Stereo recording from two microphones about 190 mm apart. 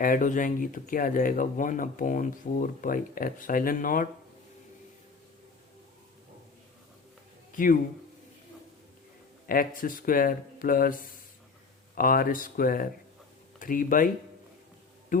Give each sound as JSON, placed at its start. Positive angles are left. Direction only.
{"t": 0.0, "sound": "speech", "side_deg": 45}
{"t": 7.5, "sound": "speech", "side_deg": 45}
{"t": 9.5, "sound": "speech", "side_deg": 50}
{"t": 15.1, "sound": "speech", "side_deg": 45}